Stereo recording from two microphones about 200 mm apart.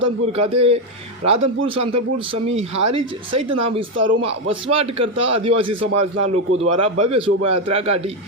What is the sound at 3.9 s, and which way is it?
Speech, 75° right (ahead or behind).